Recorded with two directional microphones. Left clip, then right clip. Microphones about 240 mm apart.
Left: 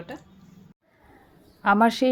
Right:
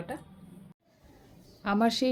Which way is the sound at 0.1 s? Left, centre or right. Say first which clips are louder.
Even; centre.